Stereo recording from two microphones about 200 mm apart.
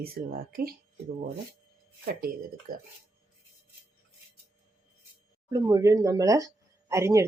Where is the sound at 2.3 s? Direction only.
50° right (ahead or behind).